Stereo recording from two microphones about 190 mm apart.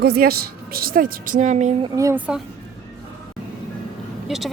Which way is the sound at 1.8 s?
15° right (ahead or behind).